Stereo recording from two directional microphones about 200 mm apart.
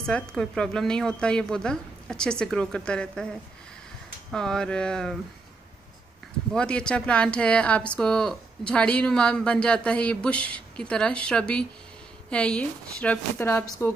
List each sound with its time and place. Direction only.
0.0 s speech: 5° left (ahead or behind)
4.3 s speech: 5° left (ahead or behind)
6.5 s a woman's voice: 5° left (ahead or behind)